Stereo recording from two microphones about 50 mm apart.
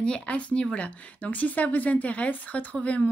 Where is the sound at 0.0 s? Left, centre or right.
Left.